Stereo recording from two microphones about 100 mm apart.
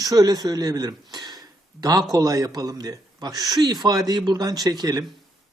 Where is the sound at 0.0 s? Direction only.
40° right (ahead or behind).